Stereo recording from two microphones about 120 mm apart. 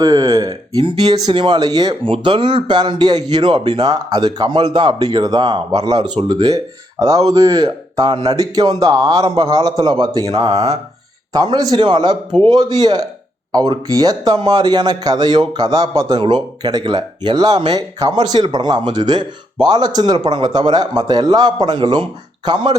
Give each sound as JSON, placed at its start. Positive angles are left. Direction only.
{"t": 0.0, "sound": "a sound", "side_deg": -30}
{"t": 0.8, "sound": "speech", "side_deg": -40}
{"t": 2.0, "sound": "speech", "side_deg": -45}